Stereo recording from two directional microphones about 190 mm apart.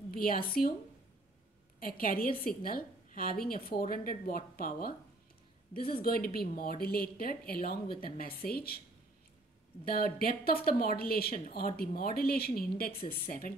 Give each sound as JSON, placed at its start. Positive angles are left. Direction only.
{"t": 0.1, "sound": "a woman's voice", "side_deg": 50}
{"t": 1.8, "sound": "a woman's voice", "side_deg": 50}
{"t": 9.8, "sound": "a woman's voice", "side_deg": 50}